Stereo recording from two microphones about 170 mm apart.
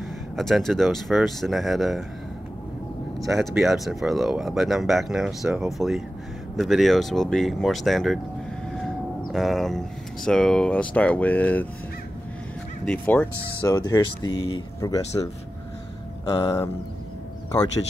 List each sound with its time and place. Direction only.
0.4 s speech: centre (ahead or behind)
3.2 s speech: centre (ahead or behind)
9.3 s speech: centre (ahead or behind)
12.8 s speech: 10° left (ahead or behind)
13.7 s speech: 20° left (ahead or behind)
16.3 s speech: 20° left (ahead or behind)